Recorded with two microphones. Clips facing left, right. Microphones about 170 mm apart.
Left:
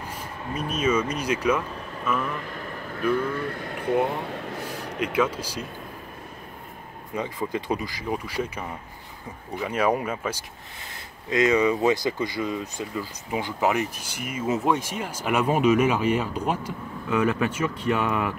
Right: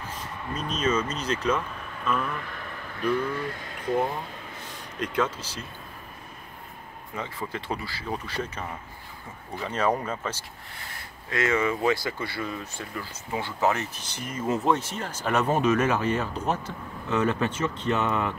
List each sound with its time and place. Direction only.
0.0 s speech: 10° left (ahead or behind)
2.0 s a sound: 5° left (ahead or behind)
3.0 s speech: 55° left (ahead or behind)
4.8 s a sound: 65° left (ahead or behind)
5.1 s speech: 10° left (ahead or behind)
7.2 s speech: 15° left (ahead or behind)